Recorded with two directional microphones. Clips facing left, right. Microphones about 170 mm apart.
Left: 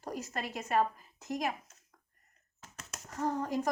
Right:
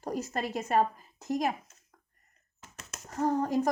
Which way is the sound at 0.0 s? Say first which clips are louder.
Right 5 dB; 35° right (ahead or behind).